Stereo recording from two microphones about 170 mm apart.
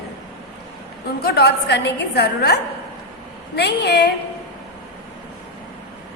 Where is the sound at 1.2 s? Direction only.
75° left (ahead or behind).